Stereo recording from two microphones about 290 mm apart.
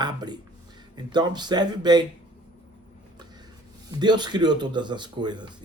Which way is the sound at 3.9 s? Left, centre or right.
Centre.